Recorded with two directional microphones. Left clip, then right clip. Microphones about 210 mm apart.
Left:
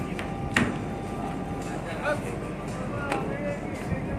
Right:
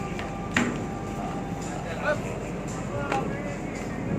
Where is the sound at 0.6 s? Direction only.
55° left (ahead or behind).